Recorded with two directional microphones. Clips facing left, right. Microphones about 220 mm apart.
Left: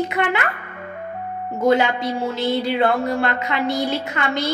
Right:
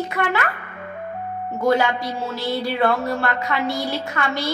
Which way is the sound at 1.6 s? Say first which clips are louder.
Left 2 dB; 20° left (ahead or behind).